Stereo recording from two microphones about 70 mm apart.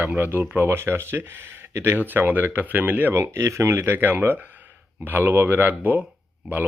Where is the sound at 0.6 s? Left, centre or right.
Right.